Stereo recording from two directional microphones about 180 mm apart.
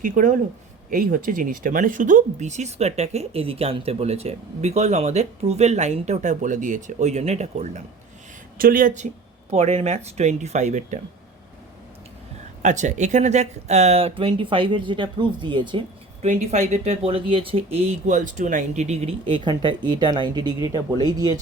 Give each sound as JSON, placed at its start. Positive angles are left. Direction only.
{"t": 0.0, "sound": "speech", "side_deg": -45}
{"t": 8.5, "sound": "speech", "side_deg": -55}
{"t": 9.5, "sound": "speech", "side_deg": -35}
{"t": 12.6, "sound": "speech", "side_deg": -40}
{"t": 16.2, "sound": "speech", "side_deg": -40}